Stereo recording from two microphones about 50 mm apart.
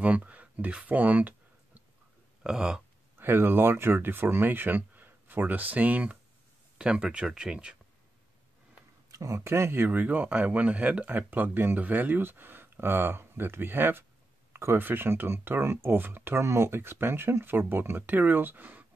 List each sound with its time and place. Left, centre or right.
0.0 s a sound: right
2.4 s speech: centre
3.2 s speech: right
6.8 s speech: centre
9.1 s a sound: right
9.4 s speech: right
9.8 s speech: right
11.1 s speech: right